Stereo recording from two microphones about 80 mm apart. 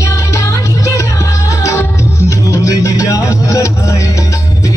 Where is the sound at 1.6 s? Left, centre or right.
Left.